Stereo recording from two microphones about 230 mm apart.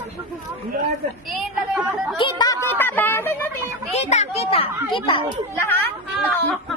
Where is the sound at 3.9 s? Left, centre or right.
Left.